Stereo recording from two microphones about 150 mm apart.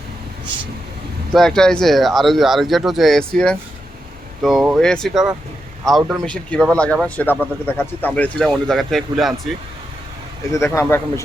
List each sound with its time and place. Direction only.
1.3 s speech: centre (ahead or behind)
10.5 s speech: 20° left (ahead or behind)